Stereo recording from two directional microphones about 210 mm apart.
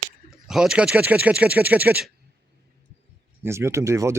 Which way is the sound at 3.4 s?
15° right (ahead or behind).